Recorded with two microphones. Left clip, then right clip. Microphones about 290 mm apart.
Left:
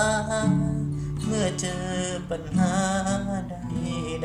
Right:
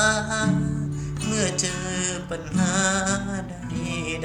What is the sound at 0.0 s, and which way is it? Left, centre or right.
Music, left.